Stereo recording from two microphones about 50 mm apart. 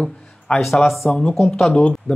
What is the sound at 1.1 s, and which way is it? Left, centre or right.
Speech, centre.